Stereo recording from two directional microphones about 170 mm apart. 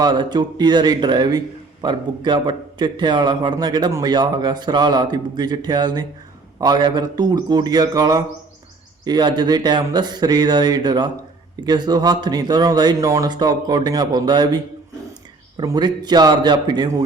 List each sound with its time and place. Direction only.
0.0 s a man's voice: 25° right (ahead or behind)